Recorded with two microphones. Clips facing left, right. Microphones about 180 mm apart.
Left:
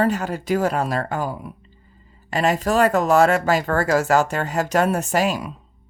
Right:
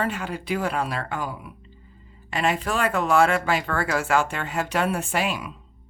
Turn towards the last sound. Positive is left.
turn(degrees=40)  # may be behind; listen again after turning